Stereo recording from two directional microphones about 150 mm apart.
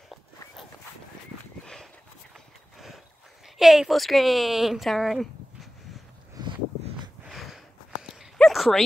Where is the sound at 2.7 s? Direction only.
Centre (ahead or behind).